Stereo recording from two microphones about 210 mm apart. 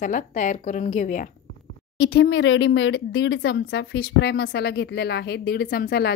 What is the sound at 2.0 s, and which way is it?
Speech, 65° left (ahead or behind).